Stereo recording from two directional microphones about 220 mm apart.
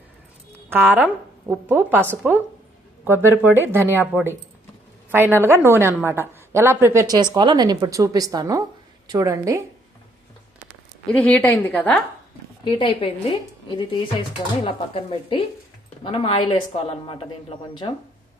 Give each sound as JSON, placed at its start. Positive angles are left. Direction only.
{"t": 0.7, "sound": "a woman's voice", "side_deg": -10}
{"t": 11.0, "sound": "a woman's voice", "side_deg": 5}
{"t": 12.6, "sound": "speech", "side_deg": 20}